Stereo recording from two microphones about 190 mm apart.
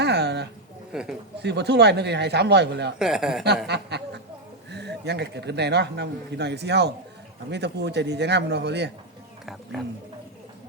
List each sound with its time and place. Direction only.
0.0 s a sound: 60° right (ahead or behind)
0.9 s speech: 5° right (ahead or behind)
1.4 s a man's voice: 60° right (ahead or behind)
3.0 s speech: 5° right (ahead or behind)
3.7 s a sound: 60° right (ahead or behind)
4.7 s a man's voice: 65° right (ahead or behind)